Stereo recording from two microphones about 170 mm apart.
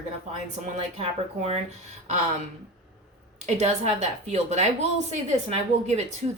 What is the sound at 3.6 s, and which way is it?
A woman's voice, 40° right (ahead or behind).